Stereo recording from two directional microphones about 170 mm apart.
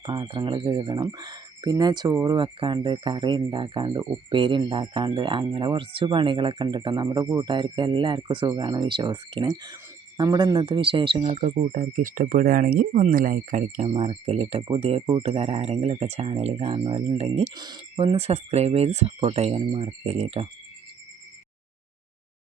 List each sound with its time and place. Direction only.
0.0 s speech: 30° right (ahead or behind)